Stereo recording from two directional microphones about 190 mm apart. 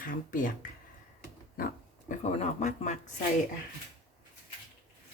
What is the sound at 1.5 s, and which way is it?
Pig, 50° left (ahead or behind).